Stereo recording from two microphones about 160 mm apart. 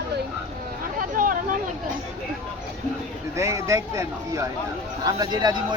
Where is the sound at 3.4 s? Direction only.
20° right (ahead or behind).